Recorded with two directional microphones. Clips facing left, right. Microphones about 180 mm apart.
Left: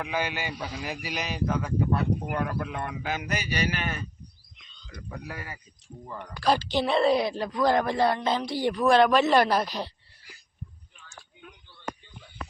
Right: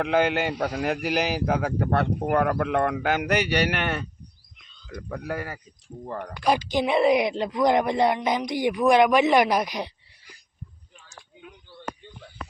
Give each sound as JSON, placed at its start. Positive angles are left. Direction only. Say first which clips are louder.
{"t": 0.0, "sound": "speech", "louder": "right 8 dB", "side_deg": -60}
{"t": 4.9, "sound": "speech", "louder": "right 8 dB", "side_deg": -55}
{"t": 6.4, "sound": "speech", "louder": "right 1 dB", "side_deg": -15}